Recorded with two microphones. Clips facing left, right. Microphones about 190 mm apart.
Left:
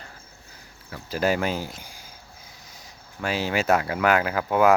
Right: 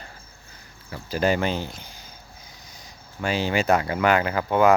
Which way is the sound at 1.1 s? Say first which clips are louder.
Right 1 dB; 5° left (ahead or behind).